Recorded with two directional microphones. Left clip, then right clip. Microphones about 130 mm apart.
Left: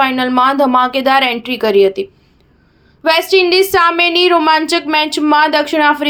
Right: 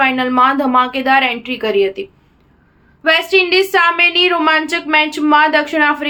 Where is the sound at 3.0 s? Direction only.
35° left (ahead or behind).